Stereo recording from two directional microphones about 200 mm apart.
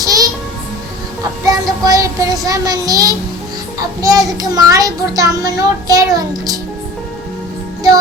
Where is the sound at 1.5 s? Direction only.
20° right (ahead or behind).